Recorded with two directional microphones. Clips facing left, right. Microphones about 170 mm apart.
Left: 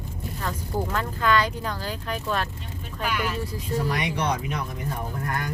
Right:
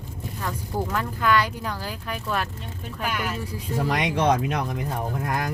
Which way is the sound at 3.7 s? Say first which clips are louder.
Right 3 dB; 90° right.